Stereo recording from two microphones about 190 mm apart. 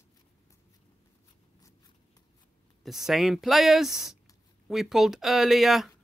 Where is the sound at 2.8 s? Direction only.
Centre (ahead or behind).